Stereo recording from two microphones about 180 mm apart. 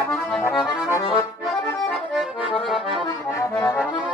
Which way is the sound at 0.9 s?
25° left (ahead or behind).